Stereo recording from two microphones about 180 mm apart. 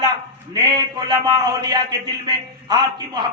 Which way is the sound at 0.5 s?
20° right (ahead or behind).